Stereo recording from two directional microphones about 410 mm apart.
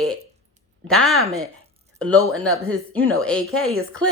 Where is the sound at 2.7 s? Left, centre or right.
Centre.